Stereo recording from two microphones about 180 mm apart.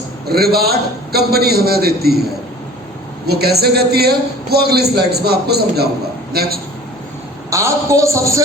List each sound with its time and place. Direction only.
0.3 s a man's voice: 60° right (ahead or behind)
3.2 s a man's voice: 60° right (ahead or behind)
7.5 s a woman's voice: 15° right (ahead or behind)